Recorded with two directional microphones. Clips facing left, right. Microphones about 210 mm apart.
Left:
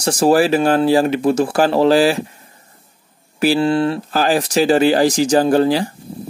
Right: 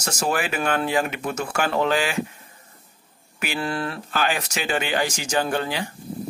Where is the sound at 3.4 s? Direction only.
30° left (ahead or behind).